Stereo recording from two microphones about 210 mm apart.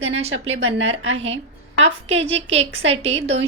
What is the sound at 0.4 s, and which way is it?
Speech, 65° right (ahead or behind).